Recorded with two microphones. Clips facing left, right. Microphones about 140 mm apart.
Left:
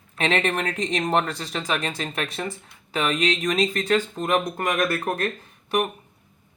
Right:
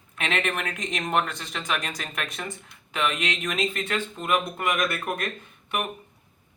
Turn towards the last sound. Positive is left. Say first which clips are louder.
# left 6 dB
turn(degrees=35)  # may be behind; listen again after turning